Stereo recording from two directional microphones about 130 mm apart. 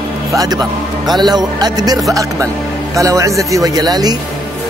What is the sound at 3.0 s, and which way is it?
Speech, 25° right (ahead or behind).